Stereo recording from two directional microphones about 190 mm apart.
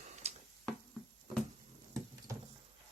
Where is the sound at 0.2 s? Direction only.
35° right (ahead or behind).